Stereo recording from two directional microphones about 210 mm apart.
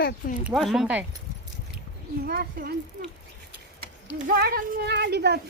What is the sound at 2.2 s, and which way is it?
Speech, 45° right (ahead or behind).